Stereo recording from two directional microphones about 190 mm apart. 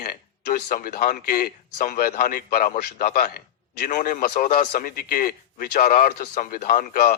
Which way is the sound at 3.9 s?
40° left (ahead or behind).